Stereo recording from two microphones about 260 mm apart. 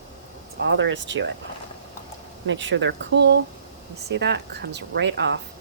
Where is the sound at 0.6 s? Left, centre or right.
Right.